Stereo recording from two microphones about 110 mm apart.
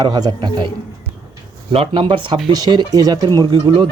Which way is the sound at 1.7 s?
55° right (ahead or behind).